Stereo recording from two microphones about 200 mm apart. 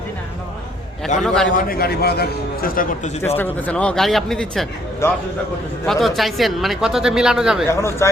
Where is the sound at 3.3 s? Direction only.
10° left (ahead or behind).